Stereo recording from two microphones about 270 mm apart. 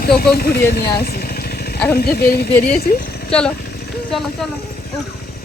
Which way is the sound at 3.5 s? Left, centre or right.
Left.